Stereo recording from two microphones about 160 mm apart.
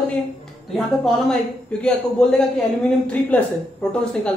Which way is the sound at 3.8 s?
5° left (ahead or behind).